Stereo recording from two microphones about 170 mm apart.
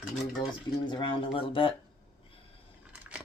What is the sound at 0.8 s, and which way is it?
Speech, 30° left (ahead or behind).